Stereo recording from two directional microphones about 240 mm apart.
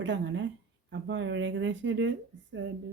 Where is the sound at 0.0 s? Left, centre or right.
Right.